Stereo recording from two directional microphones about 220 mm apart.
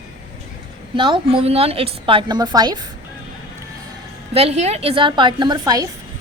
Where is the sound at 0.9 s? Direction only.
20° right (ahead or behind).